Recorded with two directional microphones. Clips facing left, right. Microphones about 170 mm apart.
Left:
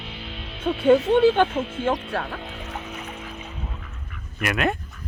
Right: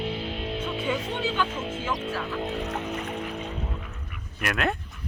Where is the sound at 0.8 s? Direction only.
60° left (ahead or behind).